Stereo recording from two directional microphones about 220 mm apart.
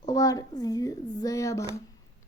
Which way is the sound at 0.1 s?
15° left (ahead or behind).